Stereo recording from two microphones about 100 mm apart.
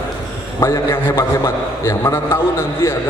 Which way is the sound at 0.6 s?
25° left (ahead or behind).